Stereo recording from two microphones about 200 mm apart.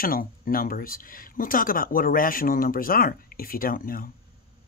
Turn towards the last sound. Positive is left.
turn(degrees=45)  # may be behind; listen again after turning